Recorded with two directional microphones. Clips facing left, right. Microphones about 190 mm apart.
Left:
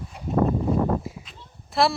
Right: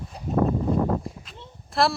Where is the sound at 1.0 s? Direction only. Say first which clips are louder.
Even; centre (ahead or behind).